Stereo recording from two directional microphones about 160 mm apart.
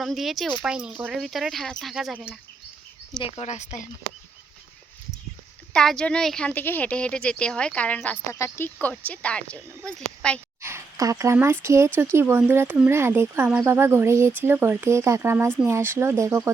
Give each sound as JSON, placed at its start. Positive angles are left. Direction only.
{"t": 0.0, "sound": "speech", "side_deg": 0}
{"t": 3.2, "sound": "speech", "side_deg": 40}
{"t": 5.7, "sound": "speech", "side_deg": 5}
{"t": 10.6, "sound": "a sound", "side_deg": -15}
{"t": 11.6, "sound": "speech", "side_deg": -15}